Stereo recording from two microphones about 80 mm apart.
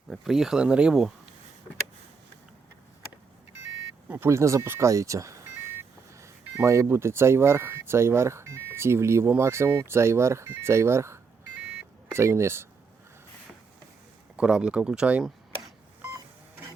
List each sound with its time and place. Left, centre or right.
0.1 s speech: centre
4.1 s speech: right
14.3 s speech: centre